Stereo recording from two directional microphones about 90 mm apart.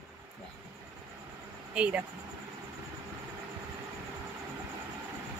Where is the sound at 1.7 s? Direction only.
10° right (ahead or behind).